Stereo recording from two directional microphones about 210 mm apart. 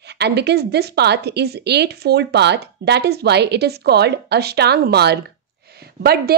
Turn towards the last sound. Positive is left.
turn(degrees=-50)  # may be behind; listen again after turning